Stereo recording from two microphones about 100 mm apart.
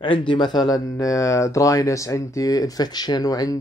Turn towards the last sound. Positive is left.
turn(degrees=35)  # may be behind; listen again after turning